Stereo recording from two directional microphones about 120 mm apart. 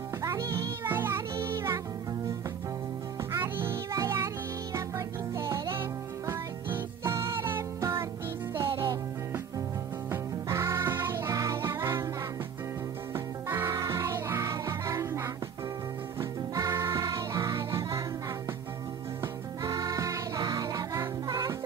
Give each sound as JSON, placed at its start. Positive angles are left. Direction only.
{"t": 0.2, "sound": "music", "side_deg": -25}
{"t": 3.3, "sound": "music", "side_deg": -20}
{"t": 13.1, "sound": "music", "side_deg": -20}
{"t": 19.6, "sound": "music", "side_deg": -30}